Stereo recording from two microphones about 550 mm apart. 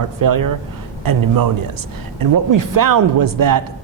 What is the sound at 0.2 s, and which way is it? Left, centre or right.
A man's voice, right.